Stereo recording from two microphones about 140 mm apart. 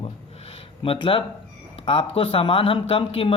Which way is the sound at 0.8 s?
40° left (ahead or behind).